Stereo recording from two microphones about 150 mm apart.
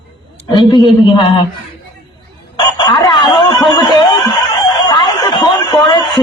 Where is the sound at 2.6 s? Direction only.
30° left (ahead or behind).